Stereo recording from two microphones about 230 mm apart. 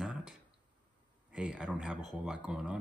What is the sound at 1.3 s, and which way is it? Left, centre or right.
Speech, centre.